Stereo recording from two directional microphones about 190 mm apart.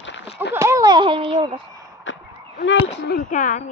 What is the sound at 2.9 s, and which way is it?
Speech, 70° left (ahead or behind).